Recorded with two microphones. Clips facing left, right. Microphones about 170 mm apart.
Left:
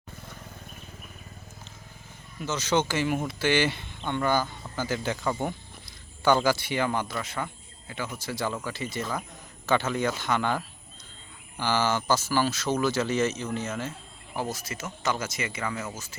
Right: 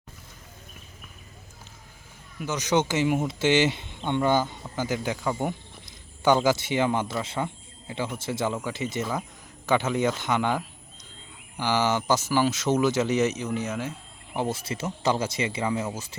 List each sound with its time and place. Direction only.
2.4 s speech: 15° right (ahead or behind)
14.3 s speech: 25° right (ahead or behind)